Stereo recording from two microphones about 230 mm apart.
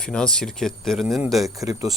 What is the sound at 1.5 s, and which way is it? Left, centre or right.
Speech, centre.